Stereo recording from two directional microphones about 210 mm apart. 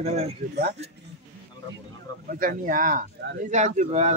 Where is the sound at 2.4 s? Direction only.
40° right (ahead or behind).